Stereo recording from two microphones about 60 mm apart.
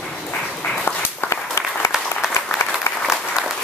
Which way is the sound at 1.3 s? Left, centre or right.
Left.